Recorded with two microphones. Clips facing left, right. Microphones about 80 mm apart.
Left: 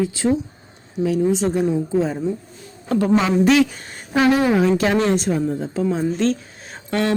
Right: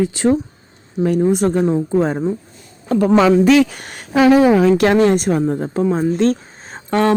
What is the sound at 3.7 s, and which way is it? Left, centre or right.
Speech, right.